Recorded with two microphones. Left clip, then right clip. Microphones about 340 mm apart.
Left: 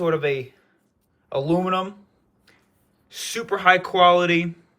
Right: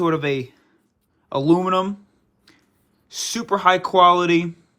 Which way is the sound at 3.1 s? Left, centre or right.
Centre.